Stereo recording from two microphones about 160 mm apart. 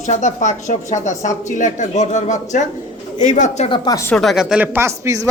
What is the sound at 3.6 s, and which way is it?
Speech, 30° left (ahead or behind).